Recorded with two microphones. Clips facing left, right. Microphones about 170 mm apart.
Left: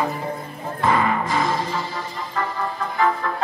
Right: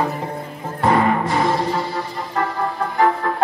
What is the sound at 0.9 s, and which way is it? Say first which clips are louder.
Music: right 4 dB; 70° right (ahead or behind).